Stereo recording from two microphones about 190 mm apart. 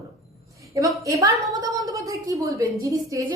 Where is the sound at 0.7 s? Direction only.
15° right (ahead or behind).